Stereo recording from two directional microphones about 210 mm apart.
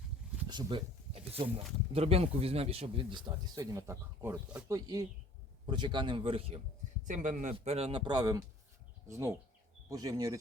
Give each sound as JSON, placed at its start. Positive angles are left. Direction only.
{"t": 0.4, "sound": "a sound", "side_deg": -20}
{"t": 1.5, "sound": "speech", "side_deg": -30}
{"t": 5.6, "sound": "speech", "side_deg": -20}
{"t": 7.1, "sound": "speech", "side_deg": -35}